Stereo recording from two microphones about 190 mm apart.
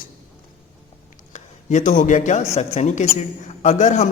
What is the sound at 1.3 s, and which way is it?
A man's voice, 40° left (ahead or behind).